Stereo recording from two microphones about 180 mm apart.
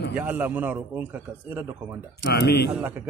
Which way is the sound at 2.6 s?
10° right (ahead or behind).